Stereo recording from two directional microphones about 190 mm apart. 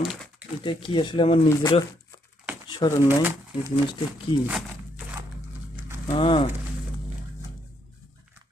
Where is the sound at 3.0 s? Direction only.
10° right (ahead or behind).